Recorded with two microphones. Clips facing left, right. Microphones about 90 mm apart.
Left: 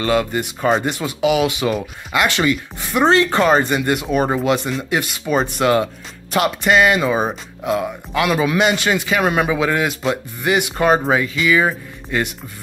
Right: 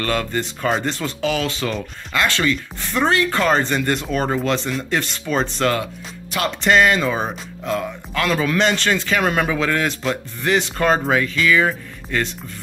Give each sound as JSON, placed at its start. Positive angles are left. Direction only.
{"t": 0.0, "sound": "speech", "side_deg": 10}
{"t": 3.1, "sound": "speech", "side_deg": 25}
{"t": 3.4, "sound": "speech", "side_deg": 10}